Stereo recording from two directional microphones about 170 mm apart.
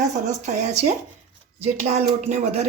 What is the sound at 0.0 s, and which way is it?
Speech, 45° right (ahead or behind).